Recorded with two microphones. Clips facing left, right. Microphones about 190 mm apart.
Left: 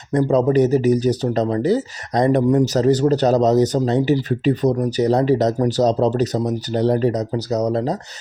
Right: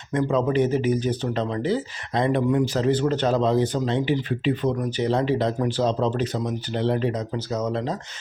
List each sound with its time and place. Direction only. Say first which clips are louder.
0.1 s speech: left 6 dB; 40° left (ahead or behind)